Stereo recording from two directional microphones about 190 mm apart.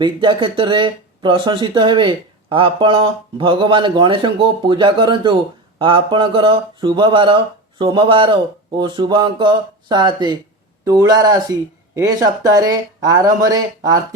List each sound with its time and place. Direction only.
0.0 s speech: 25° right (ahead or behind)